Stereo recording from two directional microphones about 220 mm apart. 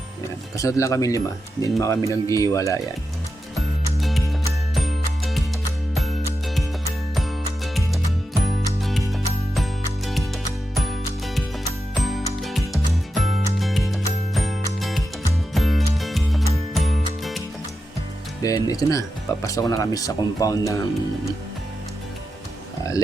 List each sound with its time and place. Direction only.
0.5 s speech: 15° left (ahead or behind)
4.7 s music: centre (ahead or behind)
11.9 s music: centre (ahead or behind)
18.4 s speech: 15° left (ahead or behind)